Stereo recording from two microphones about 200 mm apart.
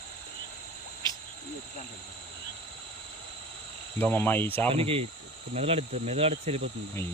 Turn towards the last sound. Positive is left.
turn(degrees=-30)  # may be behind; listen again after turning